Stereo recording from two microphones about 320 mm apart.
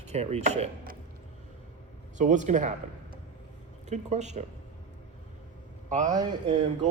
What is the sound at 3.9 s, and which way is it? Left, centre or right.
Speech, right.